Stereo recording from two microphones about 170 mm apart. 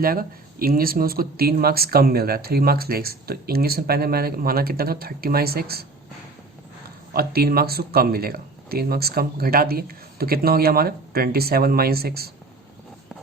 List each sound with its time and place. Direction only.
0.0 s speech: 60° right (ahead or behind)
7.1 s speech: 65° right (ahead or behind)